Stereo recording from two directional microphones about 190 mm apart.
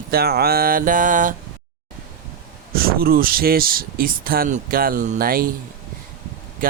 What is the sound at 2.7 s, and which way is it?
Speech, 50° right (ahead or behind).